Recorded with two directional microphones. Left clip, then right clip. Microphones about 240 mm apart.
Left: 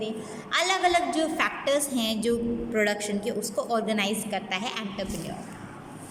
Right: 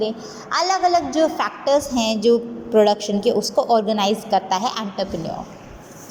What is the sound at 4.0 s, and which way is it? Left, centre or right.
Speech, centre.